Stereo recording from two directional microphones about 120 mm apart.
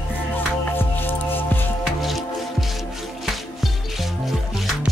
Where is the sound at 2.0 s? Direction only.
Centre (ahead or behind).